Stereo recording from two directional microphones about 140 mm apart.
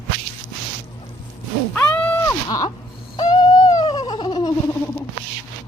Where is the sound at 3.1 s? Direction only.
30° left (ahead or behind).